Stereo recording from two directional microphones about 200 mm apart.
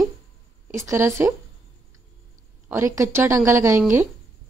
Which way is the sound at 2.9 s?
10° right (ahead or behind).